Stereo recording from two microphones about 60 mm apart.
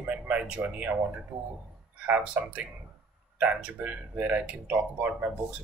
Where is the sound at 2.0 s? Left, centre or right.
Right.